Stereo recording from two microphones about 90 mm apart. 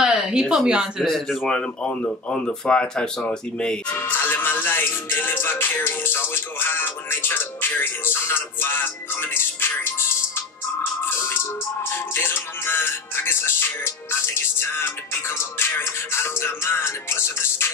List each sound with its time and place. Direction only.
0.0 s speech: 5° right (ahead or behind); by 3.7 s 10° left (ahead or behind)
3.9 s music: 25° left (ahead or behind)